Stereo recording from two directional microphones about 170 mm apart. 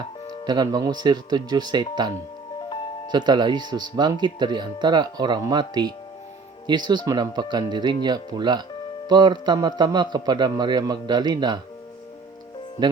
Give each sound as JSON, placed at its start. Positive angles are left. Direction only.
{"t": 0.4, "sound": "speech", "side_deg": -25}
{"t": 12.8, "sound": "speech", "side_deg": -25}